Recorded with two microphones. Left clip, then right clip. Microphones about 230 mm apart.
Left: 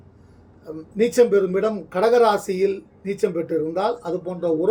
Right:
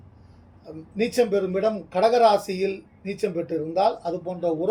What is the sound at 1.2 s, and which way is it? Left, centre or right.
A man's voice, centre.